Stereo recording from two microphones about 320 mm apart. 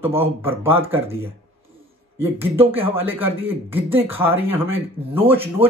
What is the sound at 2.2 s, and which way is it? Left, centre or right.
A man's voice, centre.